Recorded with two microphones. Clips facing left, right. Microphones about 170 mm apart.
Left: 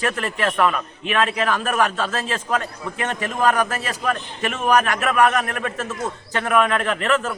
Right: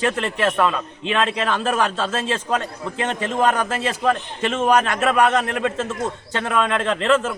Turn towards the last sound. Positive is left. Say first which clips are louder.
# right 1 dB
turn(degrees=-25)  # may be behind; listen again after turning